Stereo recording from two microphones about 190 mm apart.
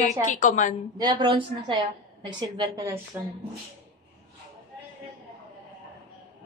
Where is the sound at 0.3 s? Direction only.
40° left (ahead or behind).